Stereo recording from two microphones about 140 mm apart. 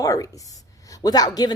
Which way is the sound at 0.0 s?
25° left (ahead or behind).